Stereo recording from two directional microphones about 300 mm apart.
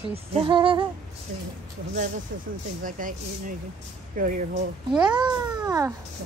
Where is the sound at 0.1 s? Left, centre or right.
Centre.